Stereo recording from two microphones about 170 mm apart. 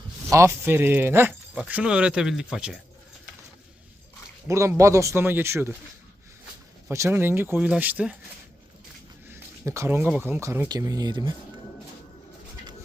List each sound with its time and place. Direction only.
0.3 s speech: 15° right (ahead or behind)
4.4 s speech: 15° right (ahead or behind)
6.8 s speech: 15° right (ahead or behind)
9.3 s speech: 15° right (ahead or behind)